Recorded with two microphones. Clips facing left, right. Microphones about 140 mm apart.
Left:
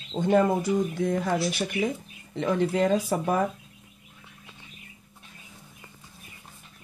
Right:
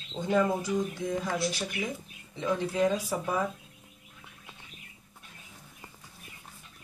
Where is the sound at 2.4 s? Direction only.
65° left (ahead or behind).